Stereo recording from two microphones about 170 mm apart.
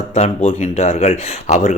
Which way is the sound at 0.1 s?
40° left (ahead or behind).